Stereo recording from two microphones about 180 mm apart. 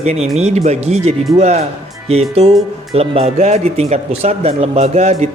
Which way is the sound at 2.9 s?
35° right (ahead or behind).